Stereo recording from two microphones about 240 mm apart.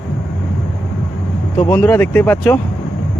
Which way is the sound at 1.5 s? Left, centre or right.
Centre.